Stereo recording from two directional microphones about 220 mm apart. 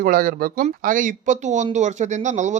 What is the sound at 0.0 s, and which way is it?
Speech, 40° right (ahead or behind).